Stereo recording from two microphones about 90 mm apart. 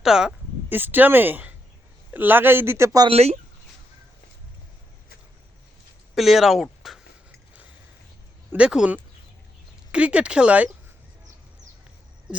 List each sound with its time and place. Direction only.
0.0 s speech: 5° right (ahead or behind)
0.7 s speech: 20° right (ahead or behind)
6.1 s speech: 5° right (ahead or behind)
8.5 s speech: 10° right (ahead or behind)